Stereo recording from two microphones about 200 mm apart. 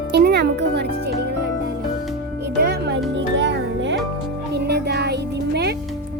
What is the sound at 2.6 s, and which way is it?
Music, 55° right (ahead or behind).